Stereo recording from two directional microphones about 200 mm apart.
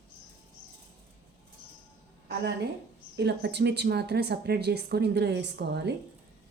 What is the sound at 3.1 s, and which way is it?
Speech, 60° right (ahead or behind).